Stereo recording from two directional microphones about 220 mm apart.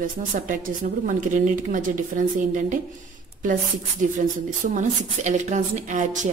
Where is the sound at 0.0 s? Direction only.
40° right (ahead or behind).